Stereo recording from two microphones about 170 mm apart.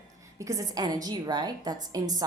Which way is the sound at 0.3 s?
20° right (ahead or behind).